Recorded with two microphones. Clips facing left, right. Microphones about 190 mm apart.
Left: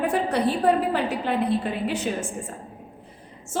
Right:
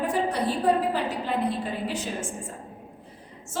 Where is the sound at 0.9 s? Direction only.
65° left (ahead or behind).